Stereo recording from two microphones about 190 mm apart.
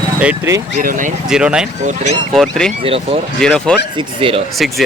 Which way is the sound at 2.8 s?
30° right (ahead or behind).